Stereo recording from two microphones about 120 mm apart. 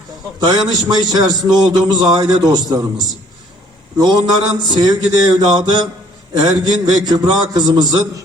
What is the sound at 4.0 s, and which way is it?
A man's voice, 35° right (ahead or behind).